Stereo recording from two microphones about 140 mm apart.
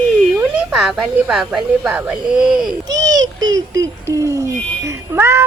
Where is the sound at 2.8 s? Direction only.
25° right (ahead or behind).